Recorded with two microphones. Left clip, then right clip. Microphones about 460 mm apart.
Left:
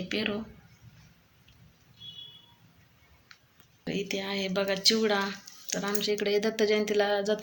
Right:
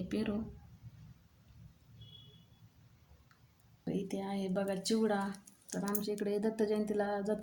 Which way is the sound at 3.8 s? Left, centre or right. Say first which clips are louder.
Left 7 dB; right.